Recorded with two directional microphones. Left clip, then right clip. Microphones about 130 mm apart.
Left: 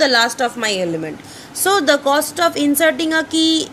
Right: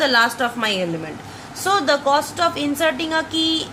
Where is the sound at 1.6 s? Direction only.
85° left.